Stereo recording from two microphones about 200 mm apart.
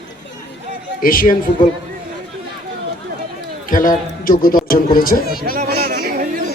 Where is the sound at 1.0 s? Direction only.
45° left (ahead or behind).